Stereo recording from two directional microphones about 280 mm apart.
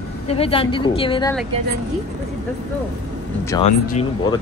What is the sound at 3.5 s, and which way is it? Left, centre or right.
Speech, centre.